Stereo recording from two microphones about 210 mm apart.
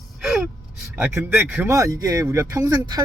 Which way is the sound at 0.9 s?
10° right (ahead or behind).